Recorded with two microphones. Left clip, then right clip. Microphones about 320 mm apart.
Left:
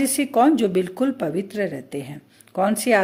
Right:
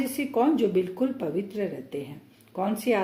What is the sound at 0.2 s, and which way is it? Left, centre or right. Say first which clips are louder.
Speech: left 6 dB; left.